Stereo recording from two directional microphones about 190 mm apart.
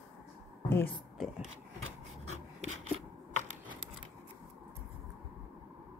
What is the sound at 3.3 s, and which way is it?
Typewriter, 40° right (ahead or behind).